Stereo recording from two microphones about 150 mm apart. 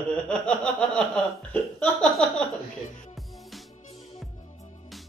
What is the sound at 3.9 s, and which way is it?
Music, 45° left (ahead or behind).